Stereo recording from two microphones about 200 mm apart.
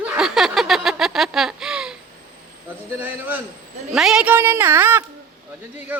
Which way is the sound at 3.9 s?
5° right (ahead or behind).